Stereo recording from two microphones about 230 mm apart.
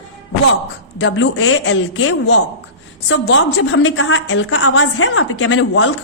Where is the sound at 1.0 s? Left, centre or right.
Left.